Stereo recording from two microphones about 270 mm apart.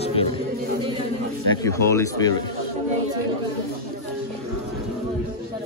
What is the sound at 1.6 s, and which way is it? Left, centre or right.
Speech, centre.